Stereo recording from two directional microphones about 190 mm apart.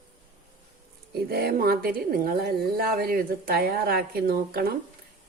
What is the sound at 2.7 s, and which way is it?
A woman's voice, 55° right (ahead or behind).